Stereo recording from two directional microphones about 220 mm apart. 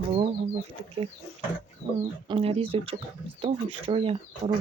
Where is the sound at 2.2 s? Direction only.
25° right (ahead or behind).